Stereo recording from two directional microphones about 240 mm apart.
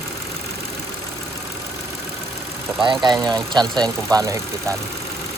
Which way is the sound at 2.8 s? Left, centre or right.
Centre.